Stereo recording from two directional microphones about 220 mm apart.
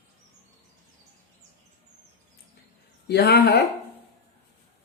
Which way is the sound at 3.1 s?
45° left (ahead or behind).